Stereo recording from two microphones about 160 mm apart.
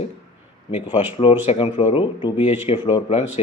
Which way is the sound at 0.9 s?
35° left (ahead or behind).